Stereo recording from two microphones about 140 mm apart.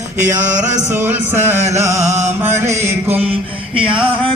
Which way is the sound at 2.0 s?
55° right (ahead or behind).